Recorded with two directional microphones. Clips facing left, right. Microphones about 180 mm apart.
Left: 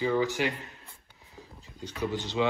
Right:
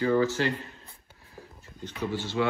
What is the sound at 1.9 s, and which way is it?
Speech, 15° left (ahead or behind).